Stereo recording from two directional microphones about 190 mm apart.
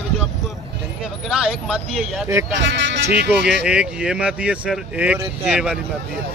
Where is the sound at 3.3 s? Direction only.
5° right (ahead or behind).